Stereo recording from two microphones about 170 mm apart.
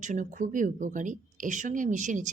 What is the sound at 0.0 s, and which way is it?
A woman's voice, 45° right (ahead or behind).